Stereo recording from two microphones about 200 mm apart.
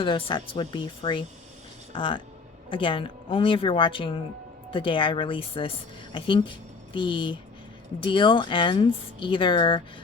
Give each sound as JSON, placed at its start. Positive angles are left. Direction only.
{"t": 0.0, "sound": "speech", "side_deg": 25}